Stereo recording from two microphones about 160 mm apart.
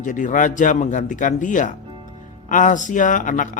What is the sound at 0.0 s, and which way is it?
Speech, 55° left (ahead or behind).